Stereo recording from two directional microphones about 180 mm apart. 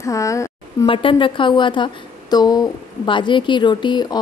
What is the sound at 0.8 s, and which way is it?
A woman's voice, 30° left (ahead or behind).